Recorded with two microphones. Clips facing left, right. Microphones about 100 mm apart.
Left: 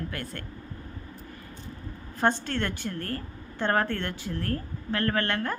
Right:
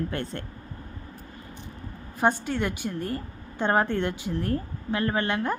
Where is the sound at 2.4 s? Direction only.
10° right (ahead or behind).